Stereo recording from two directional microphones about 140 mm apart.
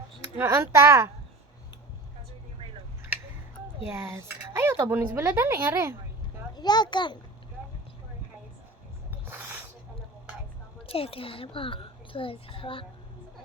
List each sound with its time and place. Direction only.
0.3 s speech: 15° right (ahead or behind)
2.6 s a sound: 40° right (ahead or behind)
3.9 s a woman's voice: 20° right (ahead or behind)
6.5 s a child's voice: 30° left (ahead or behind)
9.3 s snake: 15° right (ahead or behind)
10.8 s a woman's voice: 40° left (ahead or behind)